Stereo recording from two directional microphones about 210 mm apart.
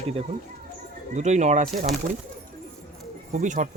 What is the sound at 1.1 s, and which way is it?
Speech, 35° right (ahead or behind).